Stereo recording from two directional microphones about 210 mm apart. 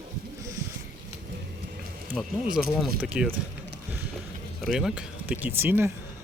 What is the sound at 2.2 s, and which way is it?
Speech, centre (ahead or behind).